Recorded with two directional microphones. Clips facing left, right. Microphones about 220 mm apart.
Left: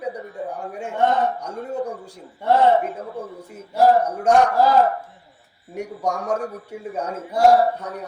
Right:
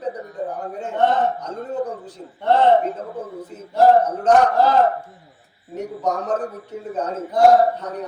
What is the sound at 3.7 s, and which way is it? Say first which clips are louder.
Speech: right 2 dB; 10° left (ahead or behind).